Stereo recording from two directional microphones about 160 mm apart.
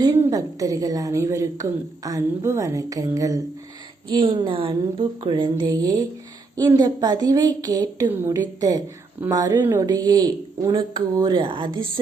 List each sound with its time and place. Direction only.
0.0 s a woman's voice: 20° right (ahead or behind)